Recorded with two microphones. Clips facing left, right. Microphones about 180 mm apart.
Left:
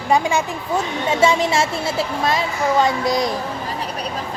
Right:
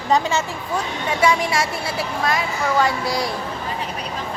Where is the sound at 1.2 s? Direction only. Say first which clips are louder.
Left 2 dB; 25° left (ahead or behind).